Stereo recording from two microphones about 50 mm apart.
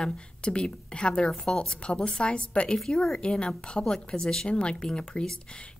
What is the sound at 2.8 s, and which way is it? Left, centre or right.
Speech, centre.